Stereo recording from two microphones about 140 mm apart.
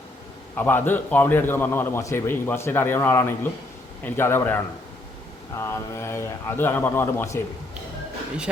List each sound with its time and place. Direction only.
0.5 s a man's voice: 15° left (ahead or behind)